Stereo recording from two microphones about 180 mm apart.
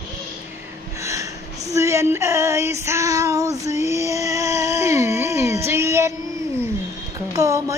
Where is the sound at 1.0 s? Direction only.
15° right (ahead or behind).